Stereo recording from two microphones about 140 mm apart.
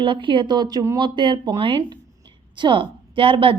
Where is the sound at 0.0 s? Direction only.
35° right (ahead or behind).